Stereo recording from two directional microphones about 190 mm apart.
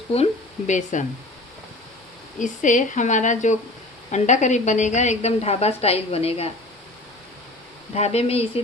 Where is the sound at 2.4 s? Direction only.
40° left (ahead or behind).